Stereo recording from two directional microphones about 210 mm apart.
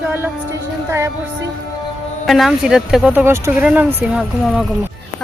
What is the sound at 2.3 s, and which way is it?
Speech, centre (ahead or behind).